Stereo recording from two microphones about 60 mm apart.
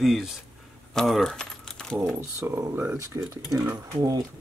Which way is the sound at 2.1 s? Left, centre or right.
Right.